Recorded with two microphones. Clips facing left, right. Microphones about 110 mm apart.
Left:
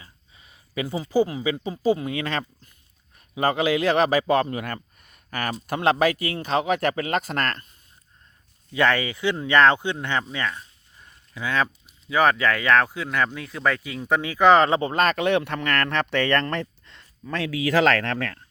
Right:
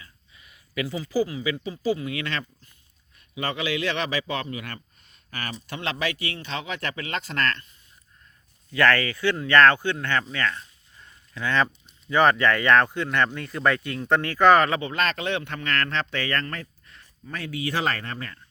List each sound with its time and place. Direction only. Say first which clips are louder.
0.0 s a sound: even; 30° left (ahead or behind)
1.3 s a man's voice: left 2 dB; 35° left (ahead or behind)
8.7 s speech: even; 15° left (ahead or behind)
14.8 s speech: left 5 dB; 40° left (ahead or behind); by 16.5 s 70° left (ahead or behind)
17.3 s speech: left 7 dB; 90° left